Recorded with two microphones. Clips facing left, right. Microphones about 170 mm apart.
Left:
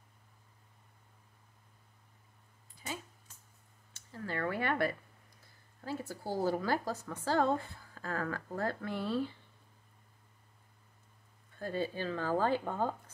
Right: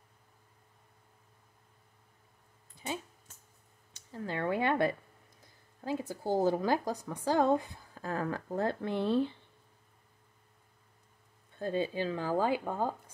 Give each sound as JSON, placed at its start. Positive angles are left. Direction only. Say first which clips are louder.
{"t": 3.9, "sound": "speech", "louder": "right 2 dB", "side_deg": -20}
{"t": 11.5, "sound": "speech", "louder": "right 4 dB", "side_deg": -20}